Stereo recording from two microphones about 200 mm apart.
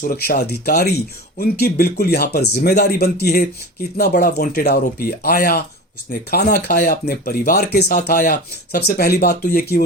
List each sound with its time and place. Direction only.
0.1 s speech: 55° left (ahead or behind)